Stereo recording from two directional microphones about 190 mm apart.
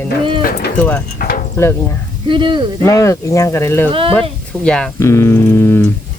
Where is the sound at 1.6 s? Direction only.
15° left (ahead or behind).